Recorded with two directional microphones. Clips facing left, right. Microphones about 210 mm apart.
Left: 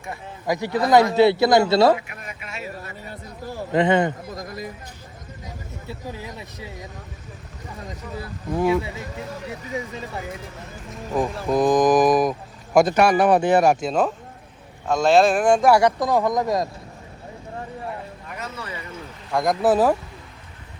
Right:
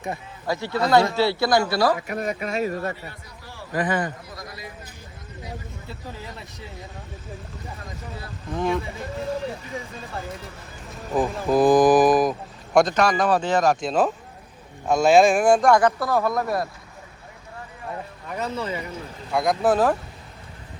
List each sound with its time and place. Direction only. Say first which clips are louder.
0.4 s speech: left 2 dB; 15° left (ahead or behind)
2.0 s speech: right 11 dB; 40° right (ahead or behind)
3.4 s speech: left 10 dB; 45° left (ahead or behind)
3.7 s speech: left 6 dB; 25° left (ahead or behind)
4.4 s speech: left 6 dB; 45° left (ahead or behind)
8.5 s speech: left 4 dB; 10° left (ahead or behind)
11.1 s speech: right 1 dB; centre (ahead or behind)
13.8 s speech: even; 5° right (ahead or behind)
15.6 s speech: left 1 dB; 10° left (ahead or behind)
18.3 s speech: right 7 dB; 30° right (ahead or behind)
19.3 s speech: left 1 dB; centre (ahead or behind)